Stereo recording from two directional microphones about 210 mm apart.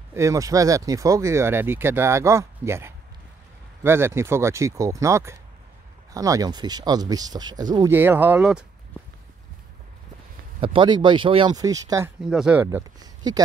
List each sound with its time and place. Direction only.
0.1 s speech: 15° right (ahead or behind)
10.6 s speech: 25° right (ahead or behind)
12.2 s speech: 5° right (ahead or behind)
12.6 s speech: 20° right (ahead or behind)